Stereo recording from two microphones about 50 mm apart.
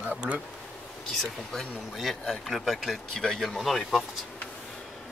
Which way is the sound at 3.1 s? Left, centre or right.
Centre.